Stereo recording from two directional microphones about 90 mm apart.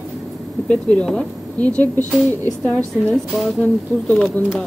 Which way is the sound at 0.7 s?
10° left (ahead or behind).